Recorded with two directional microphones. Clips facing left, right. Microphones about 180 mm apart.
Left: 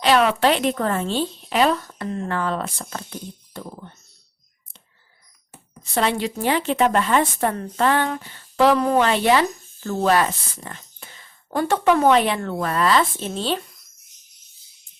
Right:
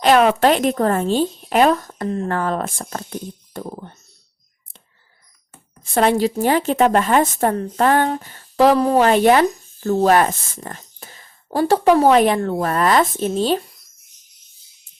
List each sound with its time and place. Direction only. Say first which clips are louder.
0.0 s a woman's voice: right 4 dB; 50° right (ahead or behind)
5.8 s a woman's voice: right 6 dB; 50° right (ahead or behind)